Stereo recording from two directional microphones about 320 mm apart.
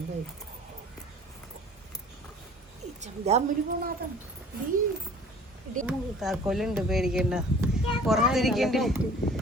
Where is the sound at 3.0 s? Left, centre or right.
Centre.